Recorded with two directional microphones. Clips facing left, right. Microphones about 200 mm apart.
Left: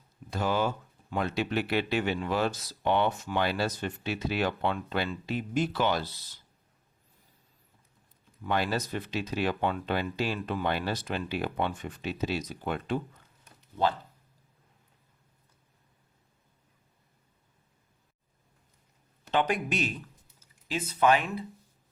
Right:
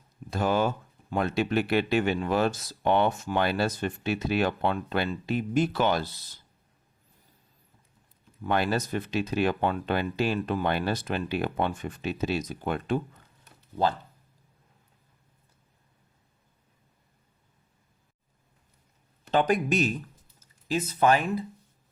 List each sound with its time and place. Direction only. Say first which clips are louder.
0.3 s speech: right 3 dB; 50° right (ahead or behind)
8.4 s speech: right 3 dB; 50° right (ahead or behind)
19.3 s speech: right 4 dB; 40° right (ahead or behind)